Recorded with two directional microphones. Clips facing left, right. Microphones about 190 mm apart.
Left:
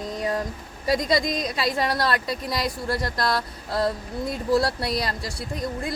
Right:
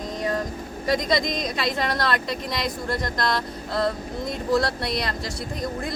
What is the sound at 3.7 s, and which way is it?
A woman's voice, 10° left (ahead or behind).